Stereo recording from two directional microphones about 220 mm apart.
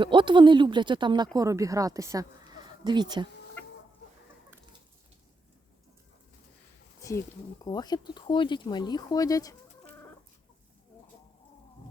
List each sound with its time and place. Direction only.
0.0 s speech: 20° right (ahead or behind)
3.6 s chicken: 5° left (ahead or behind)
7.6 s speech: 15° left (ahead or behind)